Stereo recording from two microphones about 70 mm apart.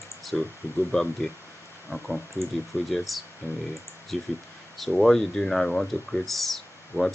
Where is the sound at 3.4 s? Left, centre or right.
Left.